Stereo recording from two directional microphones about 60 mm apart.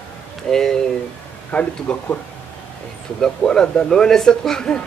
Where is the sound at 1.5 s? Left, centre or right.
Left.